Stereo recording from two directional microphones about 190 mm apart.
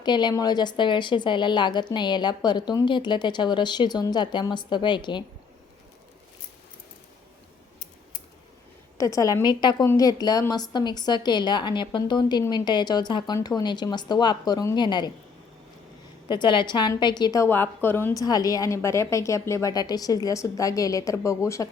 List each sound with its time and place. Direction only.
0.0 s a woman's voice: 25° left (ahead or behind)
9.0 s a woman's voice: 15° left (ahead or behind)
16.3 s a woman's voice: 25° left (ahead or behind)